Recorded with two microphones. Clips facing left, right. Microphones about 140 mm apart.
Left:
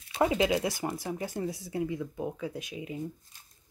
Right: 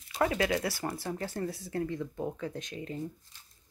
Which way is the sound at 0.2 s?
20° left (ahead or behind).